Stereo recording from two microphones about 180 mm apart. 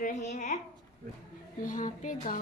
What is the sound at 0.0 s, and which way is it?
Speech, 40° left (ahead or behind).